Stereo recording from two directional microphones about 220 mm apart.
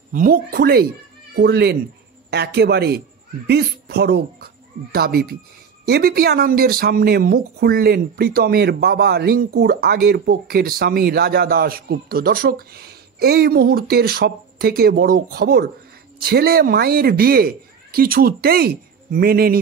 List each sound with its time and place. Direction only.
0.1 s speech: 40° right (ahead or behind)